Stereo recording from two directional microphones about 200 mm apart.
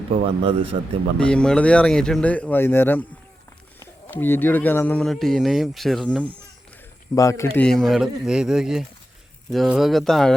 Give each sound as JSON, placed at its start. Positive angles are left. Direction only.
{"t": 0.2, "sound": "speech", "side_deg": -30}
{"t": 1.2, "sound": "speech", "side_deg": 5}
{"t": 7.2, "sound": "speech", "side_deg": 15}
{"t": 7.5, "sound": "speech", "side_deg": 5}